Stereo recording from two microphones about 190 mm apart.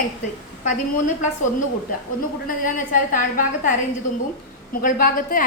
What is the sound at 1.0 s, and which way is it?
Speech, 40° left (ahead or behind).